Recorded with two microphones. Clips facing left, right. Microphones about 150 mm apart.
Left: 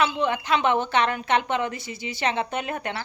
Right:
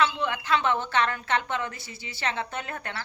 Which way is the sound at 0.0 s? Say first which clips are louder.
Left 3 dB; 20° left (ahead or behind).